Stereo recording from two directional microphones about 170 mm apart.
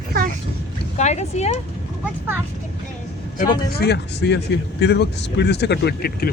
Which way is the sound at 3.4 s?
75° left (ahead or behind).